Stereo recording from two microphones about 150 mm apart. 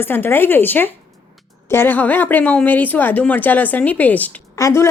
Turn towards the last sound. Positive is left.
turn(degrees=20)  # may be behind; listen again after turning